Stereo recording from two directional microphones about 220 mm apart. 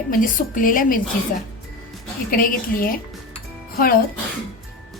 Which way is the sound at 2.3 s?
40° left (ahead or behind).